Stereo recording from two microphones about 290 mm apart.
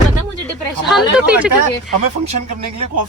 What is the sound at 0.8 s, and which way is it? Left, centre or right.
Speech, centre.